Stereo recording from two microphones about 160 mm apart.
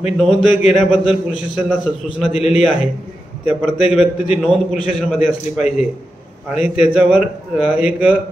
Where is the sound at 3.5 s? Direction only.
10° right (ahead or behind).